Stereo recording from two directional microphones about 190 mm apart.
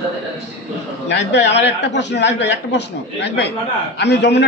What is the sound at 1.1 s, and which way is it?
A man's voice, 65° left (ahead or behind).